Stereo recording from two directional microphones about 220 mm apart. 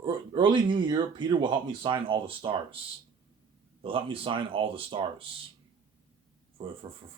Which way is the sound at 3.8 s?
25° right (ahead or behind).